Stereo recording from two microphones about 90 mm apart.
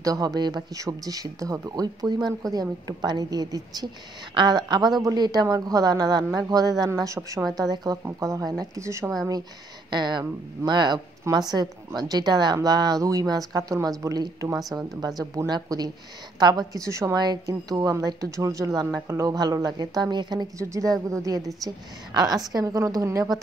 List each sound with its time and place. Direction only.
0.0 s speech: 45° right (ahead or behind)
0.7 s speech: 40° right (ahead or behind)
4.3 s speech: 60° right (ahead or behind); by 9.0 s 35° right (ahead or behind)
9.8 s a woman's voice: 55° right (ahead or behind)
16.7 s speech: 35° right (ahead or behind)
17.2 s speech: 45° right (ahead or behind)
19.3 s speech: 45° right (ahead or behind)
20.5 s speech: 35° right (ahead or behind)